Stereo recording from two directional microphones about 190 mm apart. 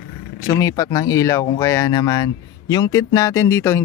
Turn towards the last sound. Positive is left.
turn(degrees=15)  # may be behind; listen again after turning